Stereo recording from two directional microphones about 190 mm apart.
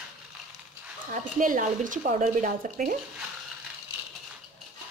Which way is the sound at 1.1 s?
45° right (ahead or behind).